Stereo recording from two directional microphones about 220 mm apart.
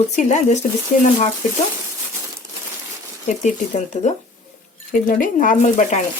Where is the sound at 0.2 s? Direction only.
30° left (ahead or behind).